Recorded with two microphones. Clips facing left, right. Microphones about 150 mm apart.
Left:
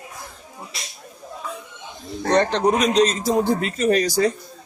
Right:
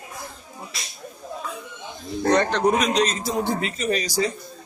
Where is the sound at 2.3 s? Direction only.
30° left (ahead or behind); by 4.3 s 50° left (ahead or behind).